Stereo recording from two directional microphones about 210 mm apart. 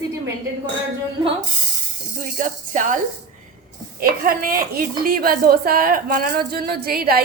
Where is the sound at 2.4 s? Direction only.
40° right (ahead or behind).